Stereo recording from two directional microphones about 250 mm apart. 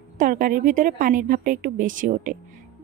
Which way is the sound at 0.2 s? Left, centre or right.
Right.